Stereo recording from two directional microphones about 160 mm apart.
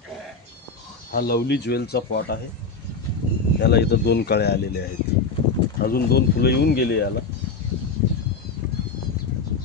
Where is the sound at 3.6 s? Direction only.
90° left.